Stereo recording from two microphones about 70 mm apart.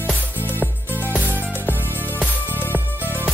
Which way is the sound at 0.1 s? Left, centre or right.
Left.